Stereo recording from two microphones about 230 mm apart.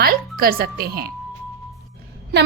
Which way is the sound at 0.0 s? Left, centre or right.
Right.